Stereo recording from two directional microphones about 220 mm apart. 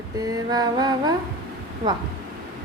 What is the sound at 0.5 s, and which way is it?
Female singing, 20° right (ahead or behind).